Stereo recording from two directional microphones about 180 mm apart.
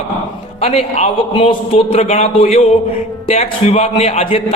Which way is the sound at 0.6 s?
35° left (ahead or behind).